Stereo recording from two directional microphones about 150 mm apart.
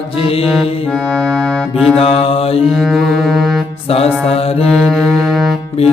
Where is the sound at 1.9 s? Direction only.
40° left (ahead or behind).